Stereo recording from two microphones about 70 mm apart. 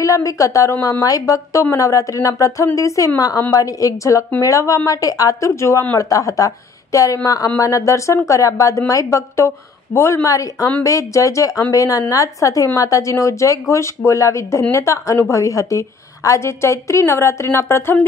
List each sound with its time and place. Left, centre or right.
0.0 s speech: left
5.6 s speech: left
5.9 s speech: left
9.9 s a woman's voice: left